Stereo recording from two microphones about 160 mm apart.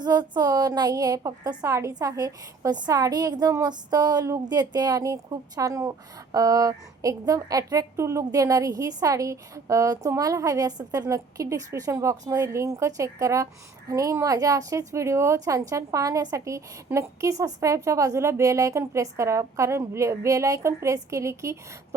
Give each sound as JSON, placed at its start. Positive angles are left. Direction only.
{"t": 0.0, "sound": "a woman's voice", "side_deg": -25}